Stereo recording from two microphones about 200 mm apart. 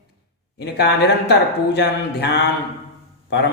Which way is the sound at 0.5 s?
60° left (ahead or behind).